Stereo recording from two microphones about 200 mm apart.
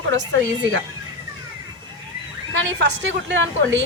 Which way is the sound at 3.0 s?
65° right (ahead or behind).